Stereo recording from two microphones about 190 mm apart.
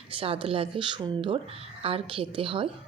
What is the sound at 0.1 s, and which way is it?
Speech, 30° right (ahead or behind).